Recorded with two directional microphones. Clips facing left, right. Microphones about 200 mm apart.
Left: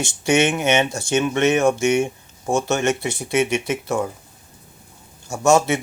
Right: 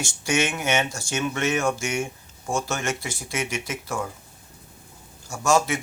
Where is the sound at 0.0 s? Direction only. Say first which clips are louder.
Left 7 dB; 20° left (ahead or behind).